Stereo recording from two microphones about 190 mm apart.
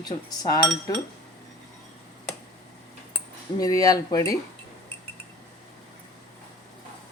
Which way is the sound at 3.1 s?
20° left (ahead or behind).